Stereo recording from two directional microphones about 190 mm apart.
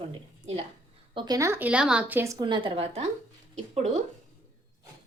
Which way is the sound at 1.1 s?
20° right (ahead or behind).